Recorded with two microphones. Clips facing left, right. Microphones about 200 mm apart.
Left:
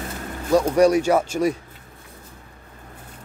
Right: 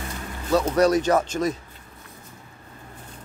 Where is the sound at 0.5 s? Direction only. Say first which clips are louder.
Left 3 dB; 10° left (ahead or behind).